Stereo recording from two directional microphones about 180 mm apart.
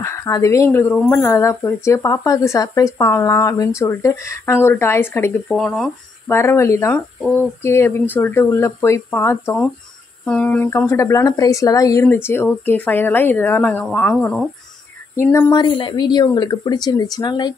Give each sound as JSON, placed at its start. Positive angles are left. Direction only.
{"t": 0.0, "sound": "speech", "side_deg": 15}
{"t": 5.5, "sound": "speech", "side_deg": 0}
{"t": 6.3, "sound": "speech", "side_deg": 15}
{"t": 15.5, "sound": "a woman's voice", "side_deg": 25}